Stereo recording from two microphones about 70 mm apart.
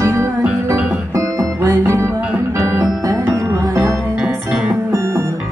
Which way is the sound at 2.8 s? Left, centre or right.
Right.